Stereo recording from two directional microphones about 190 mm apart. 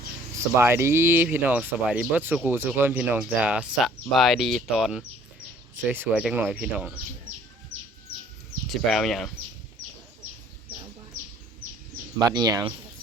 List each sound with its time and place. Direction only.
0.3 s speech: 15° right (ahead or behind)
8.9 s speech: centre (ahead or behind)
12.3 s speech: 20° right (ahead or behind)